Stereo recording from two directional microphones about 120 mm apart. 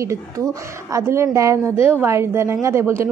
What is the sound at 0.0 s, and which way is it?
A woman's voice, 25° right (ahead or behind).